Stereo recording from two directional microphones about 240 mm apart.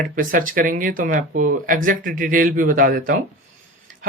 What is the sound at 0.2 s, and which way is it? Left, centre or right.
Speech, right.